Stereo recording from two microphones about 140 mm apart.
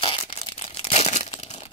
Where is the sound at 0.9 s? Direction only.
55° left (ahead or behind).